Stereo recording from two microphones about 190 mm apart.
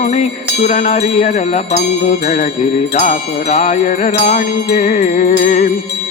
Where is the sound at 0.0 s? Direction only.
35° left (ahead or behind).